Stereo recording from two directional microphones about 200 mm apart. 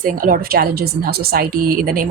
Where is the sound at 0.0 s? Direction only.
45° right (ahead or behind).